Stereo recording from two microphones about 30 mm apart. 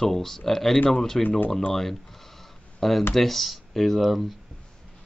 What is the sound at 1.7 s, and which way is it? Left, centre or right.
Speech, centre.